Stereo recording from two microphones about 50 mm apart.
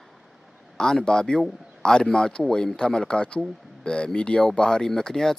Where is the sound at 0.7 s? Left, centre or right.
Centre.